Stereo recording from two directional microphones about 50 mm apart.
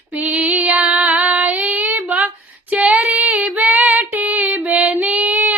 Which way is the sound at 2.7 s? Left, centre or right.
Right.